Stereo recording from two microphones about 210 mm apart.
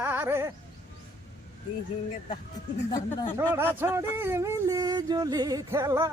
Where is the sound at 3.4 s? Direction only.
10° right (ahead or behind).